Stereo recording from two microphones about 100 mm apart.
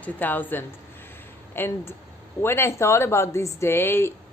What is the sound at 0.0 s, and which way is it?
A woman's voice, 20° left (ahead or behind).